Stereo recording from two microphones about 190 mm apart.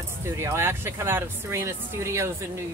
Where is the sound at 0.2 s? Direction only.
15° right (ahead or behind).